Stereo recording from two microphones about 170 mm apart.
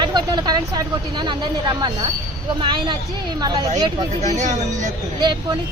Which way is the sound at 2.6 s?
25° right (ahead or behind).